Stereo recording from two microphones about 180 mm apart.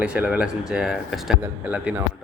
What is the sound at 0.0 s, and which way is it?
A man's voice, 5° right (ahead or behind).